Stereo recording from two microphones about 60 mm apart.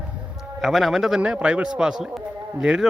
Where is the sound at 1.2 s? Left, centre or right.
Centre.